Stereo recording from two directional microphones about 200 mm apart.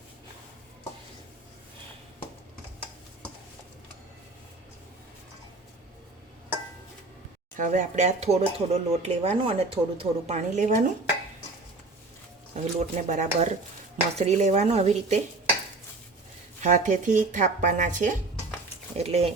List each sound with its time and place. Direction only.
7.5 s speech: 40° right (ahead or behind)
12.5 s speech: 35° right (ahead or behind)
16.6 s speech: 40° right (ahead or behind)